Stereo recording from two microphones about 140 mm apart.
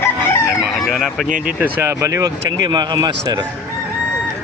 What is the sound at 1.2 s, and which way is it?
Speech, 75° right (ahead or behind).